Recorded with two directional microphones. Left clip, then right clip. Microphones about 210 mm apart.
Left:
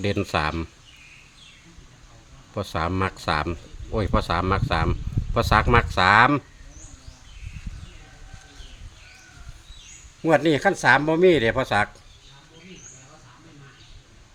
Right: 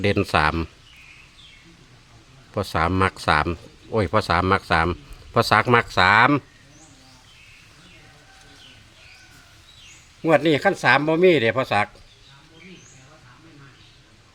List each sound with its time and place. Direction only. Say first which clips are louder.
0.0 s speech: right 5 dB; 20° right (ahead or behind)
2.6 s speech: right 5 dB; 20° right (ahead or behind)
10.2 s speech: right 1 dB; 5° right (ahead or behind)